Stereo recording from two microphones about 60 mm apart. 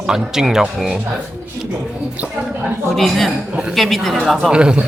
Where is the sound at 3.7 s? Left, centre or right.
Centre.